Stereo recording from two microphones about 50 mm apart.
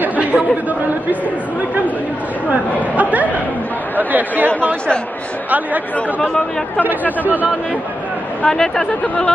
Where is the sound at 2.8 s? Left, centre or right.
Right.